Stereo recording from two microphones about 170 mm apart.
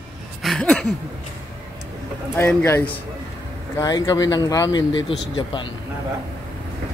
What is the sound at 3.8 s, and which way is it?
Speech, 20° left (ahead or behind).